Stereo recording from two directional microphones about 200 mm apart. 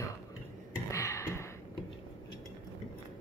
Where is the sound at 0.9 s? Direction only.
15° left (ahead or behind).